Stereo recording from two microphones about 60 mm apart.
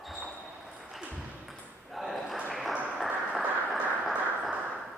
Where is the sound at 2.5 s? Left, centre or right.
Centre.